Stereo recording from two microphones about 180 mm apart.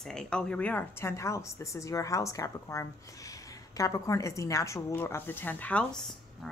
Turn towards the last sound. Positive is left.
turn(degrees=5)  # may be behind; listen again after turning